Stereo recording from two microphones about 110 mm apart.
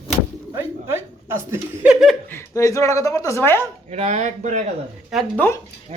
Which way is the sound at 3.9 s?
90° right.